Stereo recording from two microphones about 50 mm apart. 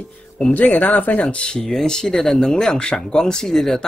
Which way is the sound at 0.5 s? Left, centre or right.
Left.